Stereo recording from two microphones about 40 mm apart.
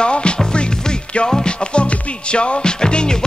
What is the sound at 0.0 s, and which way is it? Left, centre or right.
Music, left.